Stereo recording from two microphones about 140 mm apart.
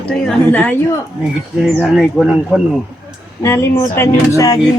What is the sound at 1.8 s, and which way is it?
Speech, 5° right (ahead or behind).